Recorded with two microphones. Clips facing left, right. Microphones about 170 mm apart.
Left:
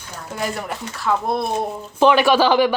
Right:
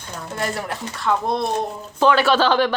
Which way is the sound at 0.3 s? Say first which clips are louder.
Even; centre (ahead or behind).